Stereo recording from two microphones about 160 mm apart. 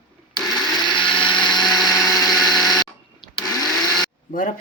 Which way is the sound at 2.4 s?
Centre (ahead or behind).